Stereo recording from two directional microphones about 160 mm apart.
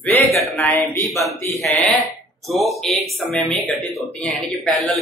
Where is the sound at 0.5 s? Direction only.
15° left (ahead or behind).